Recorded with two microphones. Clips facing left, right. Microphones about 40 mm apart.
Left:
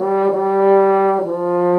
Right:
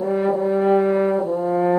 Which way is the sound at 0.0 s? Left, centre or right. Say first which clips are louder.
Left 4 dB; left.